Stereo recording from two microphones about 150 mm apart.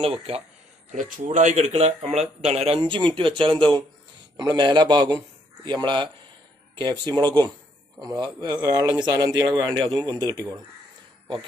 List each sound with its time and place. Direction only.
0.0 s speech: 40° right (ahead or behind)
0.9 s speech: 60° right (ahead or behind); by 10.6 s 25° right (ahead or behind)